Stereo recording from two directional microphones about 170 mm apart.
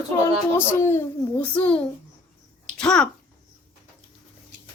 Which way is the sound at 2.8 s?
5° left (ahead or behind).